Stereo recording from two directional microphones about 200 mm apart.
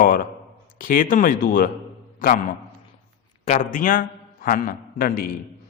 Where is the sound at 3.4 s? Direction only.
40° left (ahead or behind).